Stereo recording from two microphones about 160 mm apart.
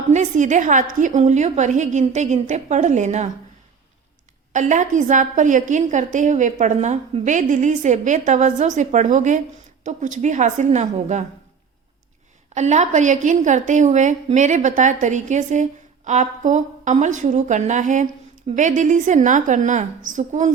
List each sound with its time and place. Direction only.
0.1 s a woman's voice: 50° right (ahead or behind)
4.5 s a woman's voice: 50° right (ahead or behind)
12.5 s a woman's voice: 45° right (ahead or behind)